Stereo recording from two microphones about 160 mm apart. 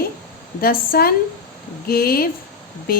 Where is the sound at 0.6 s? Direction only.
70° left (ahead or behind).